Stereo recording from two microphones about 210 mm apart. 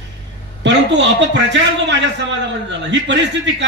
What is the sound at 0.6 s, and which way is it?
A man's voice, 60° right (ahead or behind).